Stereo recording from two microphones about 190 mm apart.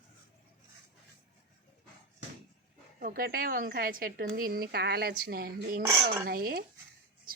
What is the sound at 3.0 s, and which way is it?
Speech, 50° right (ahead or behind).